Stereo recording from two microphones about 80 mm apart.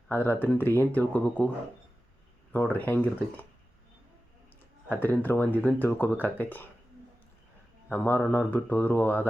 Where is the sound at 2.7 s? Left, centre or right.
Left.